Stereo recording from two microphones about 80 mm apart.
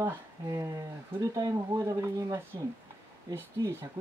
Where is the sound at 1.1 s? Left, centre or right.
Right.